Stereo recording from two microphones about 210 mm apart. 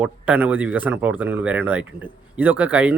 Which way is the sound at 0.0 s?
5° right (ahead or behind).